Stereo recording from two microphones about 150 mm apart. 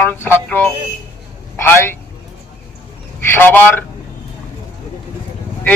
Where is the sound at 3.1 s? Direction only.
15° left (ahead or behind).